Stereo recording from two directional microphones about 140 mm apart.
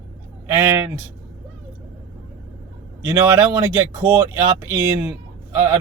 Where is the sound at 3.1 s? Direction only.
20° right (ahead or behind).